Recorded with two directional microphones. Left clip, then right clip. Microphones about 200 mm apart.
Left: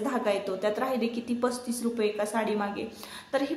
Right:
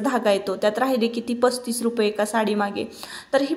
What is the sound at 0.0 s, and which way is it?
A woman's voice, 45° right (ahead or behind).